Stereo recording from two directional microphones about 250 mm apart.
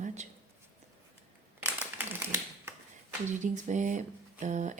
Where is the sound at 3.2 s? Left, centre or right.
Right.